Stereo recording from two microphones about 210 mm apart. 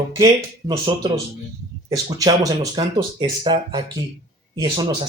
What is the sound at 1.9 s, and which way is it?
A man's voice, 15° right (ahead or behind).